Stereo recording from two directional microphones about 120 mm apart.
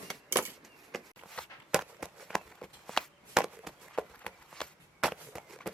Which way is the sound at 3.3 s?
5° right (ahead or behind).